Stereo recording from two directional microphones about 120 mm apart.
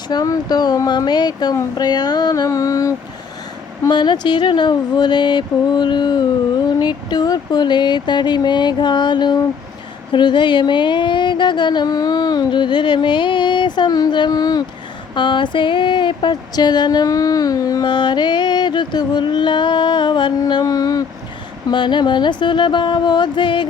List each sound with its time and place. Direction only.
0.1 s female singing: 35° left (ahead or behind)
3.8 s female singing: 40° left (ahead or behind)